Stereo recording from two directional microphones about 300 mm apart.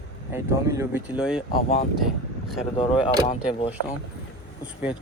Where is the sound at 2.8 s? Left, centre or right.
Centre.